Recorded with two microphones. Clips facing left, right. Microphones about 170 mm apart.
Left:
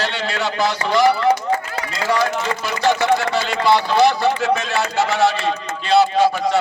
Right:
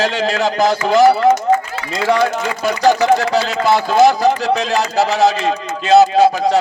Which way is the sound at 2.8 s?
40° right (ahead or behind).